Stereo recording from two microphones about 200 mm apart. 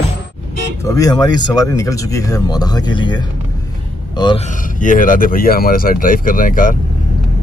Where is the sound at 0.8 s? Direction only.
15° left (ahead or behind).